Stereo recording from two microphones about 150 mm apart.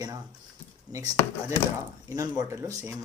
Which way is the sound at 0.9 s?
20° right (ahead or behind).